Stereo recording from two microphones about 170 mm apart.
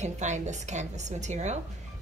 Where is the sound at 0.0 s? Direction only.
45° right (ahead or behind).